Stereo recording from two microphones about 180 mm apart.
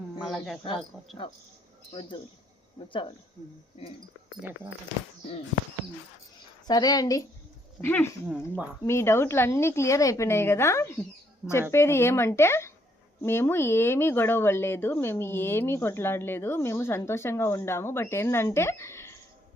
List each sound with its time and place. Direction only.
0.2 s speech: centre (ahead or behind)
1.9 s a woman's voice: 30° left (ahead or behind)
6.7 s a woman's voice: 20° left (ahead or behind)
8.3 s speech: 5° right (ahead or behind)
8.8 s speech: 15° left (ahead or behind)